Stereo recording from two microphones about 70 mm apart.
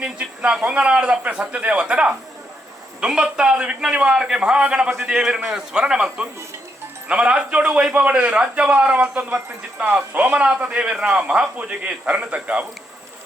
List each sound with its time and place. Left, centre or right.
0.0 s a man's voice: centre
9.7 s a man's voice: right